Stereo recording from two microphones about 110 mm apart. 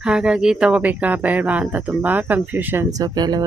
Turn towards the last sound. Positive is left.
turn(degrees=-35)  # may be behind; listen again after turning